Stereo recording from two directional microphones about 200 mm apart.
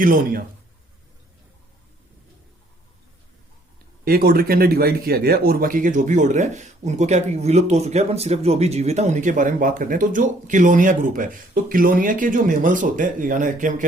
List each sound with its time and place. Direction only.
0.0 s a man's voice: 45° right (ahead or behind)
4.0 s speech: 45° right (ahead or behind)